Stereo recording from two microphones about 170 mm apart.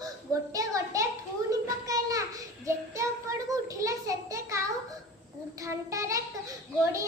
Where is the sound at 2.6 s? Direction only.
15° right (ahead or behind).